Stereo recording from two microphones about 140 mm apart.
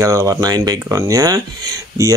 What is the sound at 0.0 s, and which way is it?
Speech, 25° right (ahead or behind).